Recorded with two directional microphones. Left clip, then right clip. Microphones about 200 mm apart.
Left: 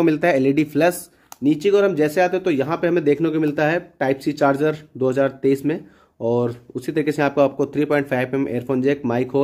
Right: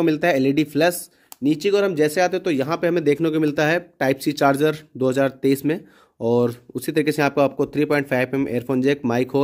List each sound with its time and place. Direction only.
0.0 s speech: 25° right (ahead or behind); by 9.4 s 40° right (ahead or behind)